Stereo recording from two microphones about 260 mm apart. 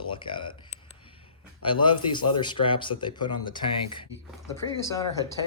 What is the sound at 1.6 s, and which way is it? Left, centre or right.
Speech, centre.